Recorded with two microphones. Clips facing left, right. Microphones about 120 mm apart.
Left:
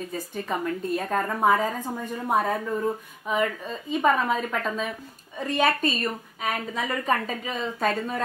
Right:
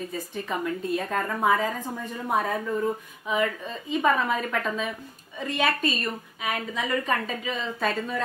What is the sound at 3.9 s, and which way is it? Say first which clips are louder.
A woman's voice: left 1 dB; 35° left (ahead or behind).